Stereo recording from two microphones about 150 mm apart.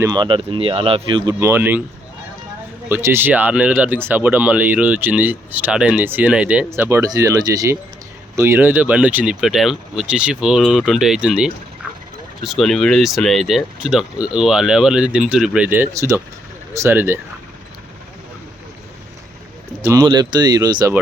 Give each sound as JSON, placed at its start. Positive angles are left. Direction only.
{"t": 0.1, "sound": "speech", "side_deg": -30}
{"t": 2.9, "sound": "speech", "side_deg": -15}
{"t": 19.8, "sound": "speech", "side_deg": -25}